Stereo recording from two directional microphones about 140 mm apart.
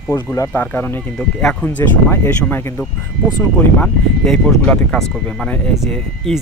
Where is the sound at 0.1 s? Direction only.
20° left (ahead or behind).